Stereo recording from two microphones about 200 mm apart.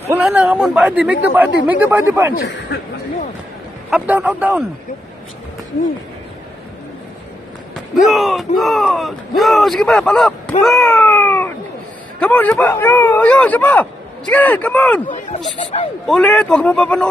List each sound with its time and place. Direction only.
0.1 s a man's voice: 5° right (ahead or behind)
2.3 s speech: 50° left (ahead or behind)
3.9 s a man's voice: 5° right (ahead or behind)
8.0 s speech: centre (ahead or behind)
10.6 s cat: centre (ahead or behind)
12.2 s speech: 5° left (ahead or behind)
15.0 s speech: 35° left (ahead or behind)
16.1 s speech: 5° left (ahead or behind)